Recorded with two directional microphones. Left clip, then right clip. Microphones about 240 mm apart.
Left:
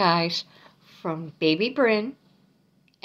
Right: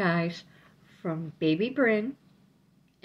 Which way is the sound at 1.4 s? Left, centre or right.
Centre.